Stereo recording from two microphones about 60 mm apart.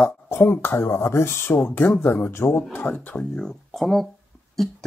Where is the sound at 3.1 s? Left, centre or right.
Centre.